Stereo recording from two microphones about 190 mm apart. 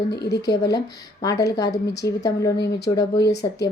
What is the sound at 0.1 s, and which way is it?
Speech, 60° left (ahead or behind).